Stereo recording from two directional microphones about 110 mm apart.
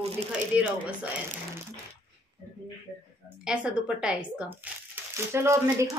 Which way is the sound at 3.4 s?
10° right (ahead or behind).